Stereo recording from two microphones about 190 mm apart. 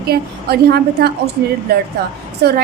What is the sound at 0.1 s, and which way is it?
A woman's voice, 55° right (ahead or behind).